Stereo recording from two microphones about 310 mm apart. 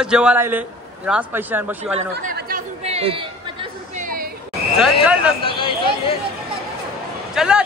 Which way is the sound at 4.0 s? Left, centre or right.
Right.